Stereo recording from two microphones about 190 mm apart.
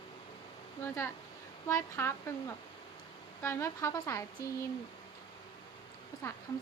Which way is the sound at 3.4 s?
15° left (ahead or behind).